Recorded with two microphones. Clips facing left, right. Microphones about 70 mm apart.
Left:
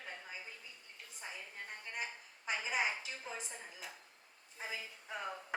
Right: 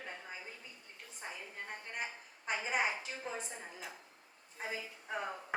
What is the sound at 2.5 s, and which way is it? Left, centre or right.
A woman's voice, right.